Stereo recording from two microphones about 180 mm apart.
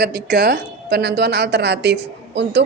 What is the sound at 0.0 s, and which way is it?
A woman's voice, 65° right (ahead or behind).